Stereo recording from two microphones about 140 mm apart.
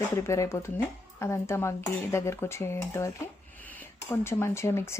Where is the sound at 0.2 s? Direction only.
20° left (ahead or behind).